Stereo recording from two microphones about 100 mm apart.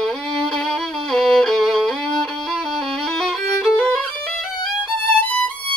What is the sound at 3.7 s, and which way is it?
Violin, 10° left (ahead or behind).